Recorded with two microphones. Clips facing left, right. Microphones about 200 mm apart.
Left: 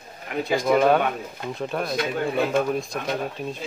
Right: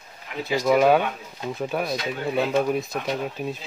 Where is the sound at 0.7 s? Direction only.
5° right (ahead or behind).